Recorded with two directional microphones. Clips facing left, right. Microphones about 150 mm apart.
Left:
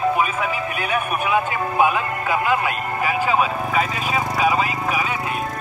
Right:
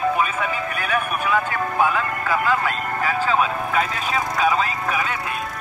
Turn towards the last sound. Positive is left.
turn(degrees=10)  # may be behind; listen again after turning